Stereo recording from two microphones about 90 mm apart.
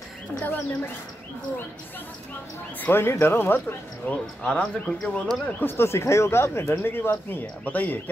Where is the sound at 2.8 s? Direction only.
25° left (ahead or behind); by 5.2 s 10° left (ahead or behind).